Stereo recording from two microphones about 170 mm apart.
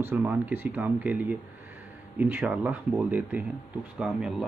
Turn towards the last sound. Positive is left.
turn(degrees=-5)  # may be behind; listen again after turning